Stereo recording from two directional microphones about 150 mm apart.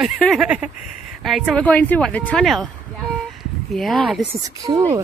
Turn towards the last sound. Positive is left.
turn(degrees=-25)  # may be behind; listen again after turning